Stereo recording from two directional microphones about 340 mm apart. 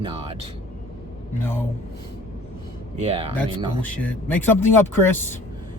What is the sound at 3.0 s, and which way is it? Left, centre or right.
Speech, centre.